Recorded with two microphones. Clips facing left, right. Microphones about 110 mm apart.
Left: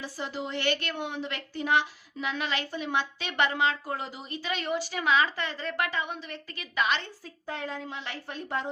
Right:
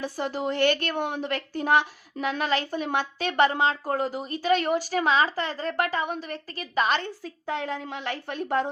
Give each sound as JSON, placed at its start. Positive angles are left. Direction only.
{"t": 0.0, "sound": "a woman's voice", "side_deg": -50}
{"t": 7.2, "sound": "a woman's voice", "side_deg": -75}